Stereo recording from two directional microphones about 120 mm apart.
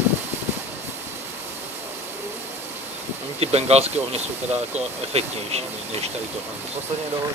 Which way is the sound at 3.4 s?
60° right (ahead or behind).